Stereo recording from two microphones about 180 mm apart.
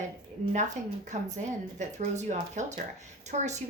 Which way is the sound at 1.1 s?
40° right (ahead or behind).